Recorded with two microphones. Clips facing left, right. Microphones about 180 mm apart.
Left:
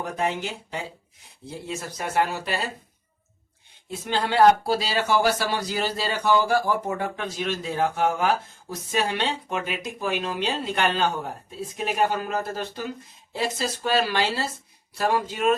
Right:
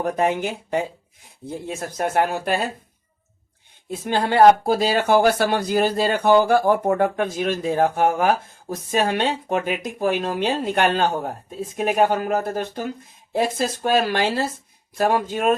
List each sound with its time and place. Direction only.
0.0 s speech: 50° right (ahead or behind)
4.0 s speech: 50° right (ahead or behind)